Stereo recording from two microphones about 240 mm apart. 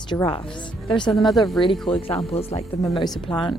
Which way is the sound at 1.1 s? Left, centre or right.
Centre.